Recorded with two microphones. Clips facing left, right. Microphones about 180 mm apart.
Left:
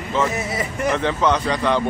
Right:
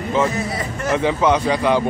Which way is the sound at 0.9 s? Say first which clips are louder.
Right 3 dB; 10° right (ahead or behind).